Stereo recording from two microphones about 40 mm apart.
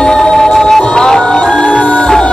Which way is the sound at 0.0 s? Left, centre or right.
Centre.